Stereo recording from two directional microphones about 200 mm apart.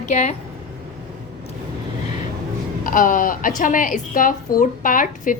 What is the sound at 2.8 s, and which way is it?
A woman's voice, 45° left (ahead or behind).